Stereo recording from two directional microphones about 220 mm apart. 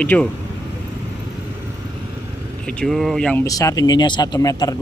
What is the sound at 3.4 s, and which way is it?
Speech, 15° left (ahead or behind).